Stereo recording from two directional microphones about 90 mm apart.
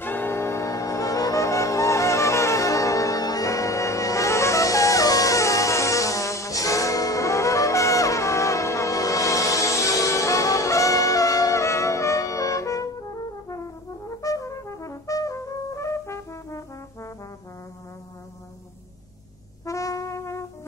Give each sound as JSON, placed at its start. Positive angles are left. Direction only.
{"t": 0.0, "sound": "music", "side_deg": 20}
{"t": 19.6, "sound": "brass instrument", "side_deg": 35}